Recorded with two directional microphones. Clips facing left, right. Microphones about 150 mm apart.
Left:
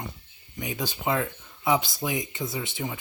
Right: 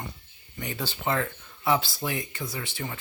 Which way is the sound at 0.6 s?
10° left (ahead or behind).